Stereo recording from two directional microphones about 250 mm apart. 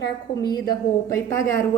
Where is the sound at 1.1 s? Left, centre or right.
Centre.